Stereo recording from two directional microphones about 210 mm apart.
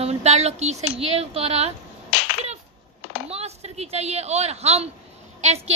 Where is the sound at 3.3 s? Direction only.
30° right (ahead or behind).